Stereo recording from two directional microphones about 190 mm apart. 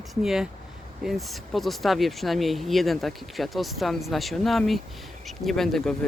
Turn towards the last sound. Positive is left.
turn(degrees=0)  # may be behind; listen again after turning